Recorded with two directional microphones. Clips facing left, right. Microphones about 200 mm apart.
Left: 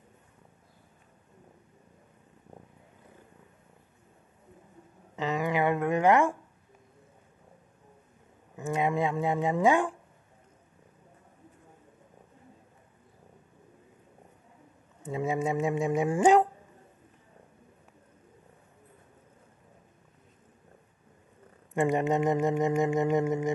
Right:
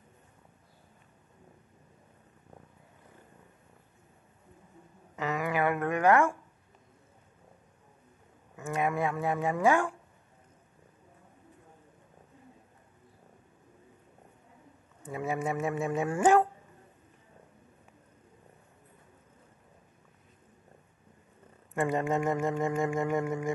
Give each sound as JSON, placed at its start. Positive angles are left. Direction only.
{"t": 5.1, "sound": "a sound", "side_deg": 20}
{"t": 8.5, "sound": "speech", "side_deg": 20}
{"t": 15.0, "sound": "speech", "side_deg": 20}
{"t": 21.7, "sound": "speech", "side_deg": 20}